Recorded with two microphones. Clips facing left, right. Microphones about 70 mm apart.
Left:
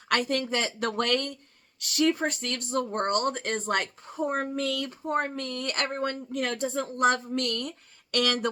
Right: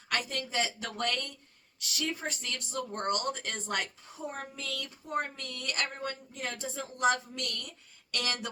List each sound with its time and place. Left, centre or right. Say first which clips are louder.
0.1 s speech: left 7 dB; left